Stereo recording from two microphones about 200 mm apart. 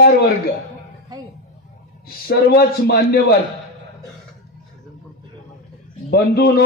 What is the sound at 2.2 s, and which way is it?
A man's voice, 50° left (ahead or behind).